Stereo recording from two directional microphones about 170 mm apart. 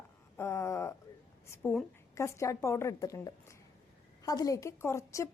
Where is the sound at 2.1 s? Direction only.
15° left (ahead or behind).